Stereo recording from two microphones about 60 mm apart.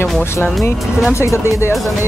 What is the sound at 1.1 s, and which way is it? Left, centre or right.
Speech, left.